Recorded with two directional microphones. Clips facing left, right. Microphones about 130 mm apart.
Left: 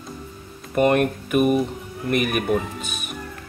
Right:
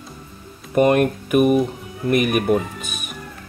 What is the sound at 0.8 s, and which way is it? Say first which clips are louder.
Speech: right 3 dB; 10° right (ahead or behind).